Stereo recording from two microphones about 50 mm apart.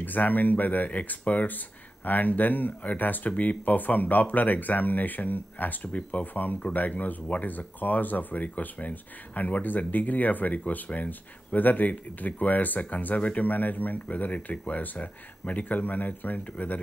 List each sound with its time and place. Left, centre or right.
0.0 s speech: left